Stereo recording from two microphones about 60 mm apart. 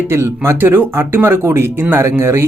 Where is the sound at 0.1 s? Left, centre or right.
Right.